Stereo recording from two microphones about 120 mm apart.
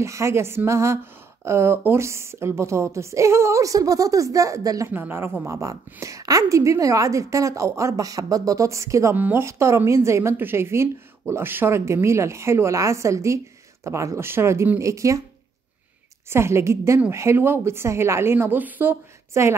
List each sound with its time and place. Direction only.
0.0 s a woman's voice: 25° right (ahead or behind)
16.3 s a woman's voice: 20° right (ahead or behind)